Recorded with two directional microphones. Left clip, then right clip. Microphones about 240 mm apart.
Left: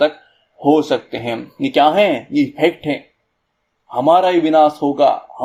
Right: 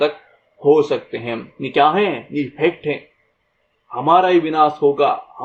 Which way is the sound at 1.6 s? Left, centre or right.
Left.